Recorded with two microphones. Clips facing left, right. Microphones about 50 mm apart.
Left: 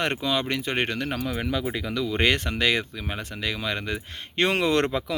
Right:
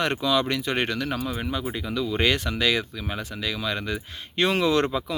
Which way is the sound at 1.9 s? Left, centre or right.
Left.